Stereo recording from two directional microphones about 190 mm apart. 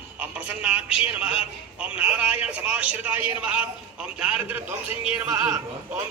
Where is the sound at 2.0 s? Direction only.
5° right (ahead or behind).